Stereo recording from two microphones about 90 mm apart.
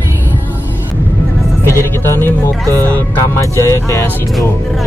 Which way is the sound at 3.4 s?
35° left (ahead or behind).